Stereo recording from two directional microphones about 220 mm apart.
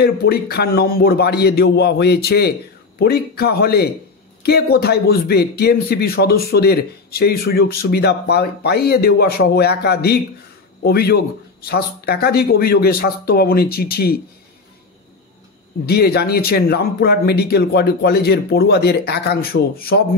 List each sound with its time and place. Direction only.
0.0 s a man's voice: 45° left (ahead or behind)
15.8 s a man's voice: 45° left (ahead or behind)